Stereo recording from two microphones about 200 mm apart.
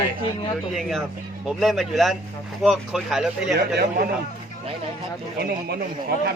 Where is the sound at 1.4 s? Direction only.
Centre (ahead or behind).